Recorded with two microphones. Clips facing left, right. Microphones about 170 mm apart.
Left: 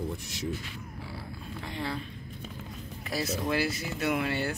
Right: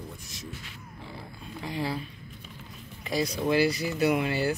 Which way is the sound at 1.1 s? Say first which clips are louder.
Right 1 dB; centre (ahead or behind).